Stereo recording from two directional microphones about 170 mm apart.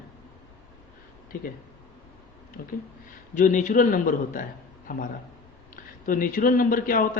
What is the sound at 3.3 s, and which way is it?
Speech, 45° left (ahead or behind).